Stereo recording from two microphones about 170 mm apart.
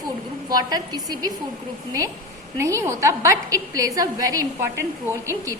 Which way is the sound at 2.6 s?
15° right (ahead or behind).